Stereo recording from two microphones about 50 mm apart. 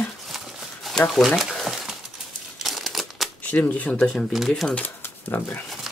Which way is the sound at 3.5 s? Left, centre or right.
Left.